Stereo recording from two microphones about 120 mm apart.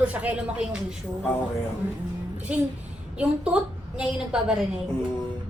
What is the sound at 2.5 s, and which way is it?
Speech, 10° right (ahead or behind).